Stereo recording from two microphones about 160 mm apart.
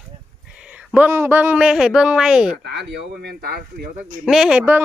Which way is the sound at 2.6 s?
90° right.